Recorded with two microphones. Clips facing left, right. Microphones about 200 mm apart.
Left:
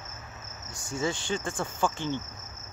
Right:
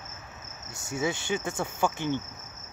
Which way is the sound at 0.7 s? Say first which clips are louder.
Right 1 dB; 25° right (ahead or behind).